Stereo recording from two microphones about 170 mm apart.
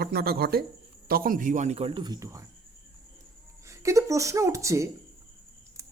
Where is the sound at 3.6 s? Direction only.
15° right (ahead or behind).